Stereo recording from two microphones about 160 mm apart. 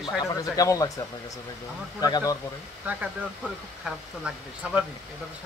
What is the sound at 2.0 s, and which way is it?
Speech, 25° left (ahead or behind).